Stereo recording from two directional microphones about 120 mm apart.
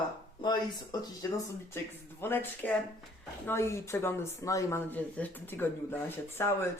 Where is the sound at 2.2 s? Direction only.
15° left (ahead or behind).